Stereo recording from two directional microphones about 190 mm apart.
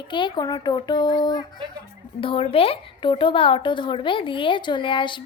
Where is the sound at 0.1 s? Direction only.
25° left (ahead or behind).